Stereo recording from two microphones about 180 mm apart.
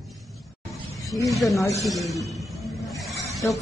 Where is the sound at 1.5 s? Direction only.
15° left (ahead or behind).